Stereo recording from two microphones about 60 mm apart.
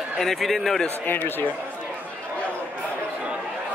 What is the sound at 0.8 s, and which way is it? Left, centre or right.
Speech, left.